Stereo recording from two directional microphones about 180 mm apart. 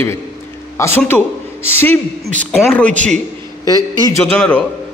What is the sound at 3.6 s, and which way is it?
Speech, 20° left (ahead or behind).